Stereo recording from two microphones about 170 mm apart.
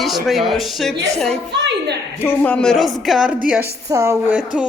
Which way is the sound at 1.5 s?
90° right.